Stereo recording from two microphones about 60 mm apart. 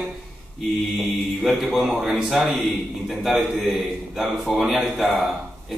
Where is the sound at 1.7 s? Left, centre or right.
Centre.